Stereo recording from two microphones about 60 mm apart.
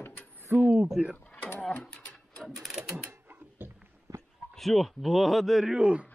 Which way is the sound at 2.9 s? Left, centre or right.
Right.